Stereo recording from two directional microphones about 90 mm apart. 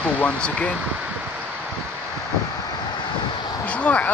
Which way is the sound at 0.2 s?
15° left (ahead or behind).